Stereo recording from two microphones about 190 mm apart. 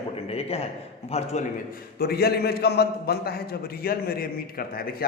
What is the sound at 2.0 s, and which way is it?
A man's voice, 55° left (ahead or behind).